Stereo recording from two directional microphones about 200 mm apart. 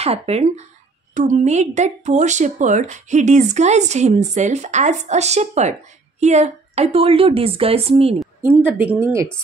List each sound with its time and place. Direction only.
0.0 s speech: 30° right (ahead or behind)
8.4 s a woman's voice: 10° right (ahead or behind)